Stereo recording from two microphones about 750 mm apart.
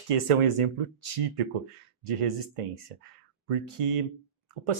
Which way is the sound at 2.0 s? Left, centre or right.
Right.